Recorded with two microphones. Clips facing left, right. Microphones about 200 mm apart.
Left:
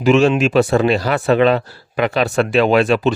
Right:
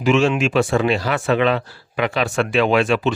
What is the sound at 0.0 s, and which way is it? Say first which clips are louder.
Speech: left 4 dB; 40° left (ahead or behind).